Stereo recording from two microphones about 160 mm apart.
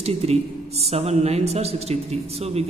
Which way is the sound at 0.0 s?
40° right (ahead or behind).